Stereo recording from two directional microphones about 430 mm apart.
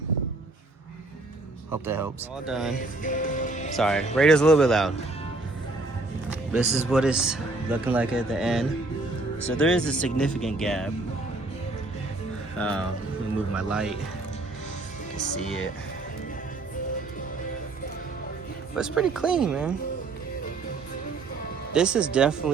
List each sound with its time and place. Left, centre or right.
1.7 s speech: centre
3.0 s music: centre
3.8 s speech: centre
6.5 s speech: centre
12.5 s speech: centre
18.8 s speech: centre
21.7 s speech: centre